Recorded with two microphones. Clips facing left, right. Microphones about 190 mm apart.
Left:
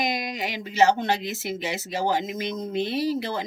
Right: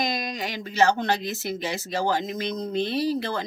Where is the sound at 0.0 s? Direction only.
20° left (ahead or behind).